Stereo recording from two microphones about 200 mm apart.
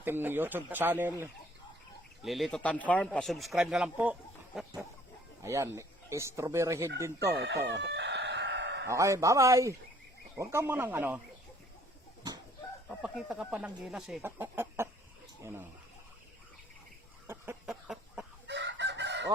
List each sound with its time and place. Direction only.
0.0 s speech: 10° right (ahead or behind)
2.2 s speech: centre (ahead or behind)
7.3 s speech: 60° right (ahead or behind)
7.8 s chicken: 60° right (ahead or behind)
8.9 s speech: 15° right (ahead or behind)
12.9 s speech: 5° right (ahead or behind)
17.2 s a sound: 10° right (ahead or behind)
17.7 s cough: centre (ahead or behind)
18.4 s chicken: 60° right (ahead or behind)